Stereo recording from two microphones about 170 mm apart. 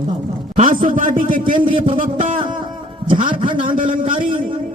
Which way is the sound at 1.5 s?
30° right (ahead or behind).